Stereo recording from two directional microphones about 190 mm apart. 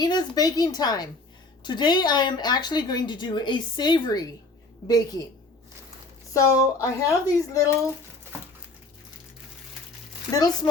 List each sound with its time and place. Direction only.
0.0 s speech: 20° left (ahead or behind)
6.3 s speech: 15° left (ahead or behind)
10.3 s speech: 20° left (ahead or behind)